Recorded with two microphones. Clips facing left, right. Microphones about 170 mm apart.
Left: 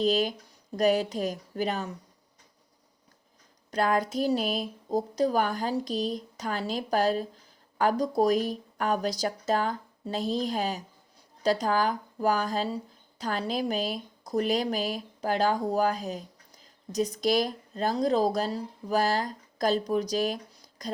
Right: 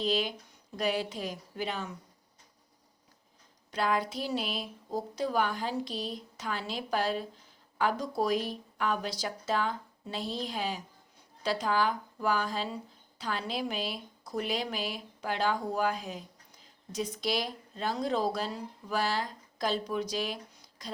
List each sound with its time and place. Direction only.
0.0 s speech: 40° left (ahead or behind)
3.7 s speech: 45° left (ahead or behind)